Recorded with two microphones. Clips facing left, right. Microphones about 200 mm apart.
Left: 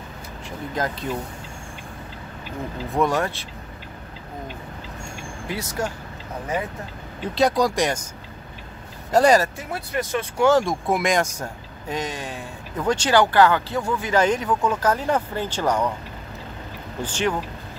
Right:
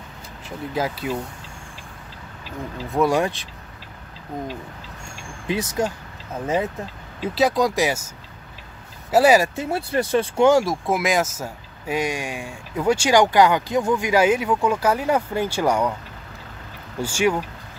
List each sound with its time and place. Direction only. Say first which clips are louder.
0.7 s speech: right 2 dB; 10° right (ahead or behind)
2.9 s speech: right 3 dB; 10° right (ahead or behind)
5.5 s speech: right 5 dB; 20° right (ahead or behind)
7.3 s speech: even; centre (ahead or behind)
9.1 s speech: right 1 dB; 5° right (ahead or behind)
9.6 s speech: right 5 dB; 30° right (ahead or behind)
10.6 s speech: even; centre (ahead or behind)
17.0 s speech: right 4 dB; 10° right (ahead or behind)